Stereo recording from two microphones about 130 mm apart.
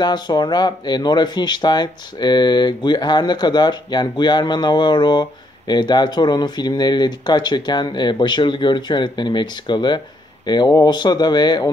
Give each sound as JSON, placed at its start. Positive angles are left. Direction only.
{"t": 0.0, "sound": "speech", "side_deg": 35}